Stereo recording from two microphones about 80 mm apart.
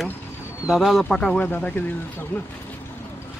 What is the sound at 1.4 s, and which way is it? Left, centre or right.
Speech, centre.